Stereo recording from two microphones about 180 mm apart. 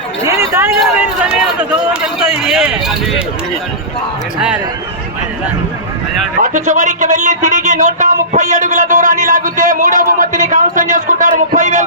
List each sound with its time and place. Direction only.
0.3 s a sound: 15° right (ahead or behind)
0.8 s speech: 5° right (ahead or behind)
4.4 s speech: 5° right (ahead or behind)
6.4 s speech: 45° right (ahead or behind)